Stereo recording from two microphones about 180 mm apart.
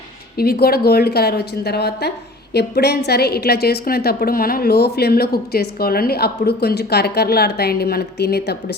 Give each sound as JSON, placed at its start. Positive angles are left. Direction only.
{"t": 0.3, "sound": "a woman's voice", "side_deg": 60}